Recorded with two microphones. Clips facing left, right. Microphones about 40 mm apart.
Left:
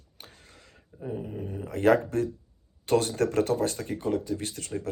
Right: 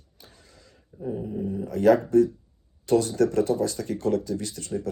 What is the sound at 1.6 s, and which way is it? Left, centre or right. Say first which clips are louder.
Speech: right 3 dB; left.